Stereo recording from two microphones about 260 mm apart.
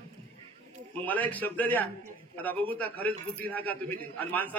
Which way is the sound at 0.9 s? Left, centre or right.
Centre.